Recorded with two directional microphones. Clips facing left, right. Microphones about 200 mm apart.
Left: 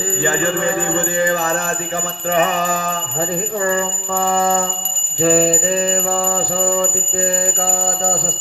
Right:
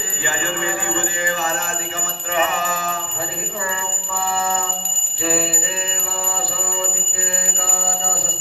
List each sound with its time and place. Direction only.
0.9 s music: 40° left (ahead or behind)
4.4 s music: 40° left (ahead or behind)